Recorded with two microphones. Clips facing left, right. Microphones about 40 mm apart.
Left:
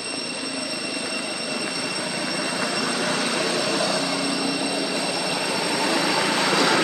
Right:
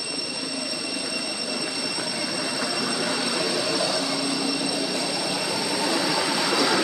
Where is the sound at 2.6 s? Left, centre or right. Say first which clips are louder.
Left 2 dB; left.